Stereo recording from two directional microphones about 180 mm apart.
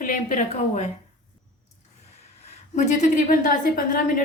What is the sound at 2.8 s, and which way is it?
A woman's voice, 40° left (ahead or behind).